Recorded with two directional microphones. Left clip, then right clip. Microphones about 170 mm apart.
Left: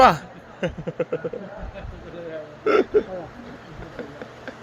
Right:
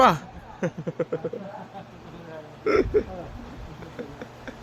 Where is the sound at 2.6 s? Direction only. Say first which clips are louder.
Left 3 dB; 15° right (ahead or behind).